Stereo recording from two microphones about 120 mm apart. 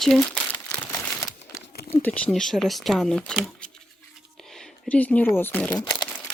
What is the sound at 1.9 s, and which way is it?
Speech, 15° left (ahead or behind).